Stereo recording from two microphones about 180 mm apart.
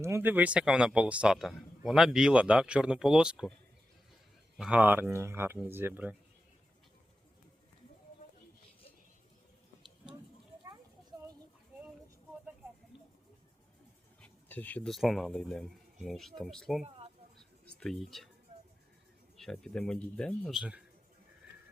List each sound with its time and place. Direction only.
0.0 s speech: 15° right (ahead or behind)
4.5 s speech: 5° right (ahead or behind)
14.2 s speech: 10° left (ahead or behind)
17.3 s a sound: centre (ahead or behind)
19.4 s speech: 5° left (ahead or behind)